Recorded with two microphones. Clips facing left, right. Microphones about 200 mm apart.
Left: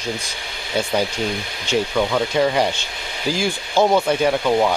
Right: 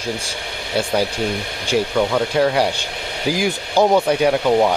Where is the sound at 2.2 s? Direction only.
Centre (ahead or behind).